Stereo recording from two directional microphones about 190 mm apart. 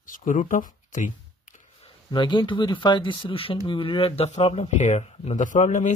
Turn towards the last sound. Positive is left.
turn(degrees=40)  # may be behind; listen again after turning